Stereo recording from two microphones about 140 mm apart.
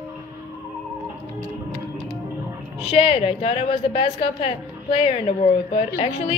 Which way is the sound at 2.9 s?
45° left (ahead or behind).